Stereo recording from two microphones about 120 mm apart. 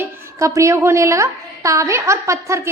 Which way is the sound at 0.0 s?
25° right (ahead or behind).